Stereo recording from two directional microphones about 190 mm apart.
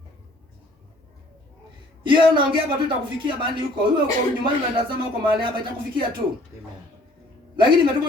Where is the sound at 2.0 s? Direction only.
25° right (ahead or behind).